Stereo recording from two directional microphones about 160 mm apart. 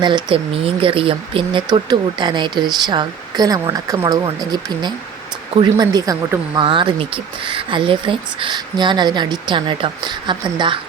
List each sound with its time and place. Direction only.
0.0 s speech: 30° right (ahead or behind)
6.7 s speech: 30° right (ahead or behind)